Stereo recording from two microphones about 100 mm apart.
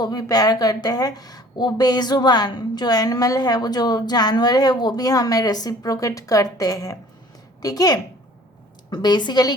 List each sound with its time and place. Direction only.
0.0 s a woman's voice: 40° left (ahead or behind)